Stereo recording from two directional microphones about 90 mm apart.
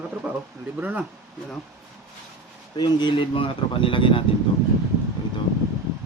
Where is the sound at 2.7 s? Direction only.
55° left (ahead or behind); by 4.2 s 75° left (ahead or behind).